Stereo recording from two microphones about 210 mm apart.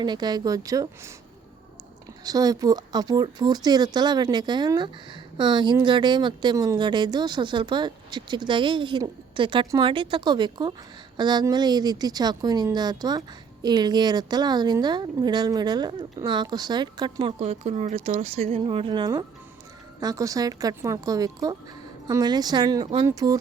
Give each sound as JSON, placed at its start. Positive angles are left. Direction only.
{"t": 0.0, "sound": "speech", "side_deg": -20}
{"t": 2.2, "sound": "speech", "side_deg": -15}